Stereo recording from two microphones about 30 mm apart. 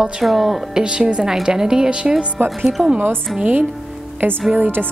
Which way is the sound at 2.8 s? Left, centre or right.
Right.